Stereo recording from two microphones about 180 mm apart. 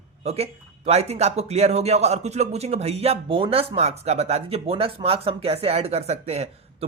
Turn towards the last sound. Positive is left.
turn(degrees=-35)  # may be behind; listen again after turning